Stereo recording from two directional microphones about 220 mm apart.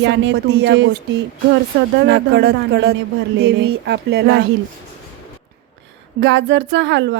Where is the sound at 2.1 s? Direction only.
50° right (ahead or behind).